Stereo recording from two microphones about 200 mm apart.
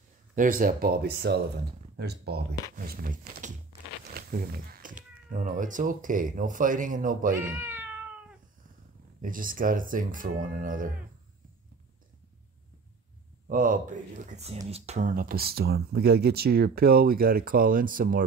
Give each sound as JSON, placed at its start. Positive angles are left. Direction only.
{"t": 0.4, "sound": "speech", "side_deg": -45}
{"t": 2.7, "sound": "speech", "side_deg": -45}
{"t": 4.1, "sound": "a sound", "side_deg": -50}
{"t": 5.3, "sound": "speech", "side_deg": -40}
{"t": 7.5, "sound": "cat", "side_deg": -10}
{"t": 9.2, "sound": "speech", "side_deg": -45}
{"t": 13.5, "sound": "speech", "side_deg": -40}